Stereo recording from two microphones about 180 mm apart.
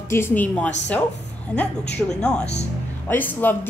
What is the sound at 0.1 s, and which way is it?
Speech, 10° left (ahead or behind).